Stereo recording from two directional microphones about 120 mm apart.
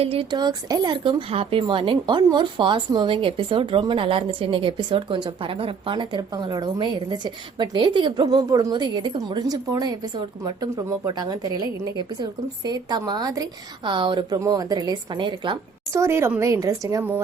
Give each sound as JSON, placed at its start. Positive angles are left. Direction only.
{"t": 0.0, "sound": "speech", "side_deg": -55}
{"t": 0.3, "sound": "a woman's voice", "side_deg": -35}
{"t": 1.3, "sound": "a woman's voice", "side_deg": -55}
{"t": 14.3, "sound": "a woman's voice", "side_deg": -30}
{"t": 15.9, "sound": "a woman's voice", "side_deg": -25}